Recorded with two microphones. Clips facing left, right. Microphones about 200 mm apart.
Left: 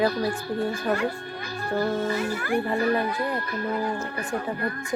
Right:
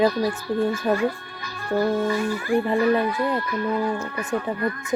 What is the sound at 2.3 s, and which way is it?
Speech, 65° left (ahead or behind).